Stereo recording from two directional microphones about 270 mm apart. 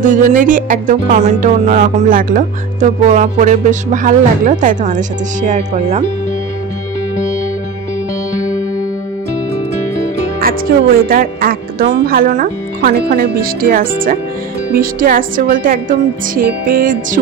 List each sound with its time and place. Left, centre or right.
0.0 s music: right
10.4 s music: right
11.1 s speech: right